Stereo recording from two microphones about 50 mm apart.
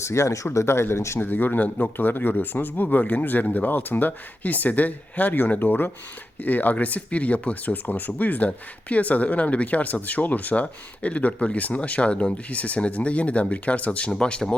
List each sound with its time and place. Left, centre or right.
0.0 s speech: left
0.5 s speech: left
1.2 s speech: left; by 14.5 s centre